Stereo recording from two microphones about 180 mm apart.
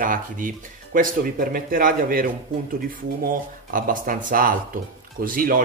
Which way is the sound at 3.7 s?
50° right (ahead or behind).